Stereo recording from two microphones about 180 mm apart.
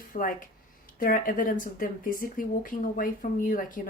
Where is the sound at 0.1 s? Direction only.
50° left (ahead or behind).